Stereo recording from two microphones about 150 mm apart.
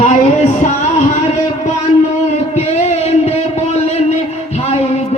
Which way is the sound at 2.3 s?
50° left (ahead or behind).